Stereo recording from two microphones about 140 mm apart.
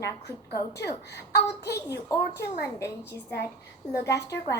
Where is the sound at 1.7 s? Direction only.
20° left (ahead or behind).